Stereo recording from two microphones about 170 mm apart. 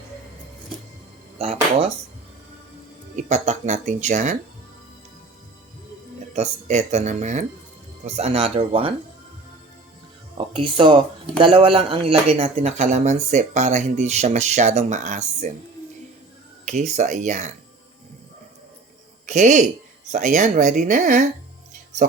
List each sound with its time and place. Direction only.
1.4 s speech: 35° right (ahead or behind)
3.2 s speech: 40° right (ahead or behind)
6.3 s speech: 40° right (ahead or behind)
10.3 s music: 30° right (ahead or behind)
11.3 s speech: 30° right (ahead or behind)
16.6 s speech: 45° right (ahead or behind)
19.2 s speech: 45° right (ahead or behind)